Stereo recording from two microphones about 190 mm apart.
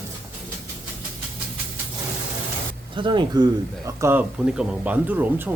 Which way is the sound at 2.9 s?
25° right (ahead or behind).